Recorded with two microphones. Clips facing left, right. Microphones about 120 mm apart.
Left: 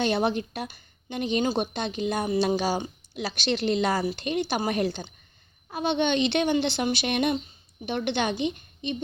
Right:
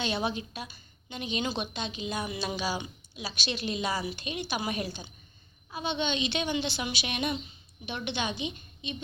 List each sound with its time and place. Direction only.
0.0 s a woman's voice: 55° left (ahead or behind)